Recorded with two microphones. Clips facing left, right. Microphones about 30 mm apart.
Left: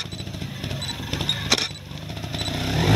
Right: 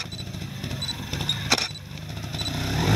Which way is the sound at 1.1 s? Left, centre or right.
Centre.